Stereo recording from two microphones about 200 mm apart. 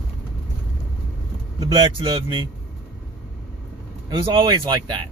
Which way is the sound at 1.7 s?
25° right (ahead or behind).